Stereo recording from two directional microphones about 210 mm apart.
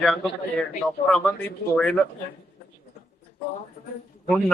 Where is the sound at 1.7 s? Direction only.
5° left (ahead or behind).